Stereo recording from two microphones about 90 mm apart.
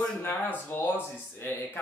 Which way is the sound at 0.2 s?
25° left (ahead or behind).